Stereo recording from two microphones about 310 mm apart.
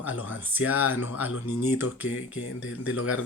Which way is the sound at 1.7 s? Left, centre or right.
Left.